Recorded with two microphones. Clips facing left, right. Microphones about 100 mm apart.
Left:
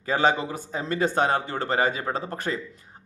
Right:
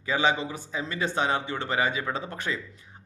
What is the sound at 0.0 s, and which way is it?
Speech, 45° left (ahead or behind).